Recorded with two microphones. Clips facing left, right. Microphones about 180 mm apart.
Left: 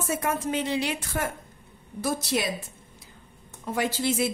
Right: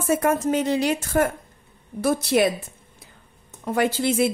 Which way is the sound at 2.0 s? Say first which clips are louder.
Right 8 dB; 60° right (ahead or behind).